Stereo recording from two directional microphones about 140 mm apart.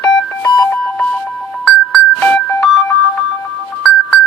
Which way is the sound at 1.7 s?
5° left (ahead or behind).